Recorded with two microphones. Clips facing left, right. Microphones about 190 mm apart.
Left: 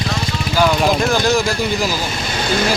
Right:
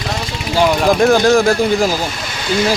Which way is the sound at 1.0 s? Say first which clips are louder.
Right 5 dB; 55° right (ahead or behind).